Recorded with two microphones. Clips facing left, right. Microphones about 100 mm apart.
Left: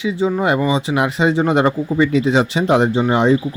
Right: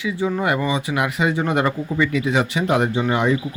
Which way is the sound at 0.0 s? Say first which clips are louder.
Left 4 dB; 20° left (ahead or behind).